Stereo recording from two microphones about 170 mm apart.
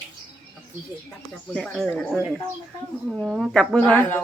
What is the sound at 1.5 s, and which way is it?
Speech, centre (ahead or behind).